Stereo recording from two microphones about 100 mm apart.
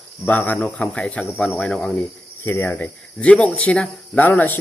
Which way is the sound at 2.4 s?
25° left (ahead or behind).